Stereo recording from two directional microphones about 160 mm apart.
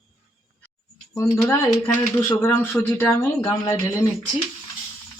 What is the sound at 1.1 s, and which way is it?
Speech, 15° left (ahead or behind).